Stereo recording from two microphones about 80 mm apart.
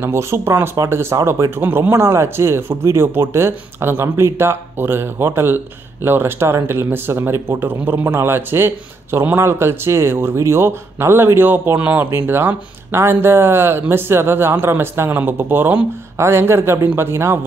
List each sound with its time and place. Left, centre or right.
0.0 s speech: right